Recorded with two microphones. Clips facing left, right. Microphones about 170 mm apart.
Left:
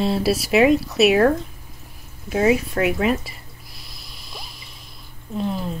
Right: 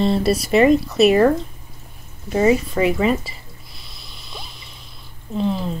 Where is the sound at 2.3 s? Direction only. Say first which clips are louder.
Right 2 dB; centre (ahead or behind).